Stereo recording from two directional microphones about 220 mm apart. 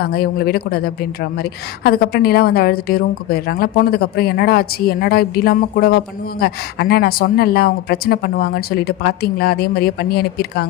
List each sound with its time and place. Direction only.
0.0 s a woman's voice: 45° left (ahead or behind)